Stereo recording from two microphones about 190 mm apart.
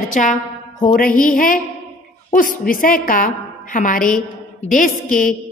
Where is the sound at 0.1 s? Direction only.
40° left (ahead or behind).